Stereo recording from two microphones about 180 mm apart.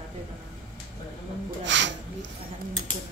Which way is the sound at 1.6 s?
85° right.